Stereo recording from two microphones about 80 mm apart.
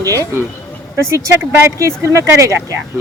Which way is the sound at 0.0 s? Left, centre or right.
Right.